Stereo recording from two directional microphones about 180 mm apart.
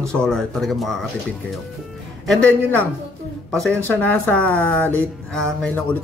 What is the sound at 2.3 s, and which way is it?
Speech, 5° left (ahead or behind).